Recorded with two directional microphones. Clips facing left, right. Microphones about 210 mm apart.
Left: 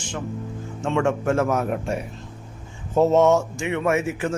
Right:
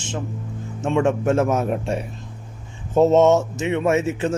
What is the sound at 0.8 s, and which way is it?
Speech, 20° right (ahead or behind).